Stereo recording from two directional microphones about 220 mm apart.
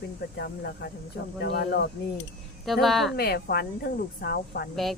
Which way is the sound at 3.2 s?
45° left (ahead or behind).